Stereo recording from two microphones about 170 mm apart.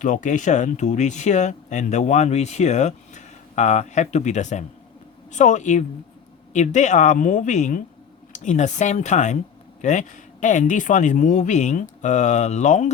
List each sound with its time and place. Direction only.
0.0 s speech: 45° left (ahead or behind)